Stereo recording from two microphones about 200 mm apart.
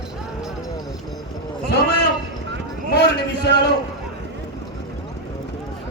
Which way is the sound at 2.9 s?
55° left (ahead or behind).